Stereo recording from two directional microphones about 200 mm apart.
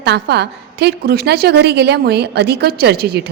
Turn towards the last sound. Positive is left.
turn(degrees=-55)  # may be behind; listen again after turning